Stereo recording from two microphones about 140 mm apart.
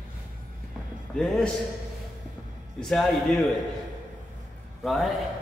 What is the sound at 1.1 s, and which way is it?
Speech, 5° left (ahead or behind).